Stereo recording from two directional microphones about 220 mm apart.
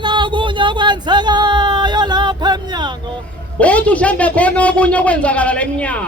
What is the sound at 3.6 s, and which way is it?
A man's voice, 5° left (ahead or behind).